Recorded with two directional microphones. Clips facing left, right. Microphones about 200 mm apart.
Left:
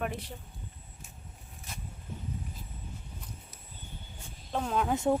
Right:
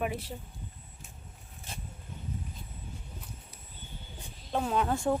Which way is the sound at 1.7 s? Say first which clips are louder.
Right 1 dB; 30° right (ahead or behind).